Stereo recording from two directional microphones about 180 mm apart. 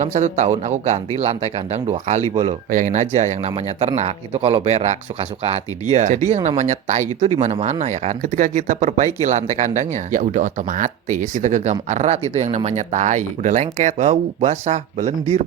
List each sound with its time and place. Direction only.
0.0 s speech: 40° right (ahead or behind)
2.6 s speech: 45° right (ahead or behind)